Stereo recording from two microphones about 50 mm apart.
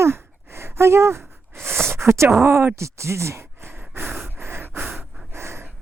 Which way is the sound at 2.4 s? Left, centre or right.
Right.